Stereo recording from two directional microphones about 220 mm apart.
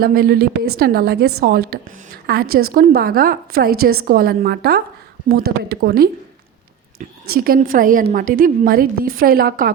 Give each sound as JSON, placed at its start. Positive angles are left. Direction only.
{"t": 0.0, "sound": "a woman's voice", "side_deg": -45}
{"t": 7.3, "sound": "a woman's voice", "side_deg": -40}